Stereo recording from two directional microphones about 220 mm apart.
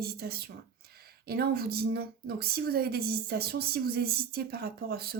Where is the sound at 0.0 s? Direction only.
45° right (ahead or behind).